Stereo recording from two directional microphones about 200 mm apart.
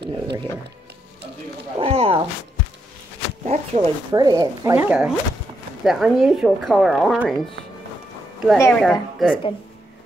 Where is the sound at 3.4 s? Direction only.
35° right (ahead or behind).